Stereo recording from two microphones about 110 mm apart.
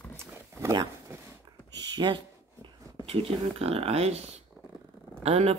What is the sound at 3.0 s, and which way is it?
Speech, 65° right (ahead or behind).